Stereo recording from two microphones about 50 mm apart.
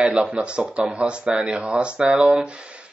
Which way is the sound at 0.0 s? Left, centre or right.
Centre.